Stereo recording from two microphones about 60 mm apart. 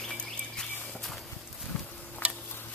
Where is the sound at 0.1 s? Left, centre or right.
Left.